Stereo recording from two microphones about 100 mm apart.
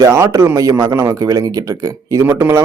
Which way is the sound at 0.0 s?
30° right (ahead or behind).